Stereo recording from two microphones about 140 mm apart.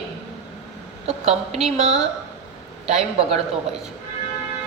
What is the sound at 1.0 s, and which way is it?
A woman's voice, 50° right (ahead or behind).